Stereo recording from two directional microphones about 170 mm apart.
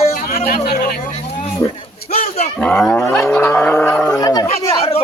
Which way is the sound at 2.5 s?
5° left (ahead or behind).